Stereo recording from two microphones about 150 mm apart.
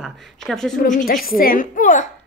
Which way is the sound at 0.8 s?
65° left (ahead or behind).